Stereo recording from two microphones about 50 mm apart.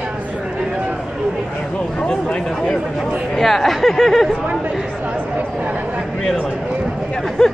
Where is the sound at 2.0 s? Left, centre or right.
Centre.